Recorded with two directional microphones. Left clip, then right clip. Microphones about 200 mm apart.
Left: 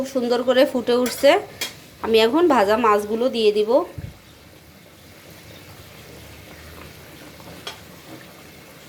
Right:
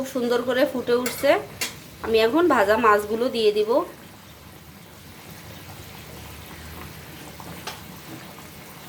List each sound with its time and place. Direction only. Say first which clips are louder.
0.0 s a woman's voice: left 3 dB; 10° left (ahead or behind)